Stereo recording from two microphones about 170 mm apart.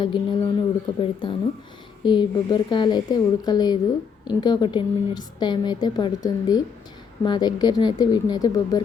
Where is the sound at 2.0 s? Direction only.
25° left (ahead or behind).